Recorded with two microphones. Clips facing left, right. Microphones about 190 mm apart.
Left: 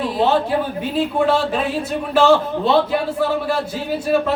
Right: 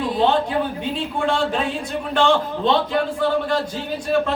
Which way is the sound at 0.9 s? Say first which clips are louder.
Left 6 dB; 5° left (ahead or behind).